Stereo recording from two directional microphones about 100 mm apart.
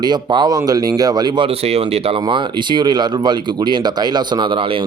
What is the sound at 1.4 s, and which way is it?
Speech, 90° right.